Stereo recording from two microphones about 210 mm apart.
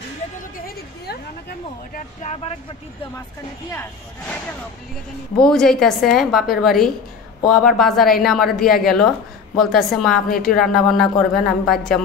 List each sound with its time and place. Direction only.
0.6 s a woman's voice: 45° left (ahead or behind)
3.7 s speech: 10° left (ahead or behind)
5.4 s speech: centre (ahead or behind)